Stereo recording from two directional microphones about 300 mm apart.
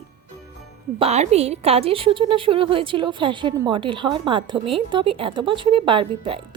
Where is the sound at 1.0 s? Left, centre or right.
Right.